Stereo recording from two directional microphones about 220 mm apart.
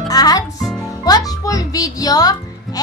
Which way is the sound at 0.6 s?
Centre (ahead or behind).